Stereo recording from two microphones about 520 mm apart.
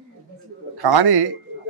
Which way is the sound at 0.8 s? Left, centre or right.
Right.